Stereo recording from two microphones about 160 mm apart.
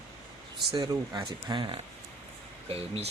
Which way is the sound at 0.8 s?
25° right (ahead or behind).